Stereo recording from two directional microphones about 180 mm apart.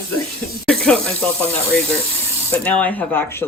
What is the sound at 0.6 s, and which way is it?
Speech, 5° left (ahead or behind).